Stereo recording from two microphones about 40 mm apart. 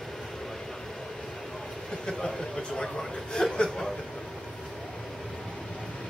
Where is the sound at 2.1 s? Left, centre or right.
Centre.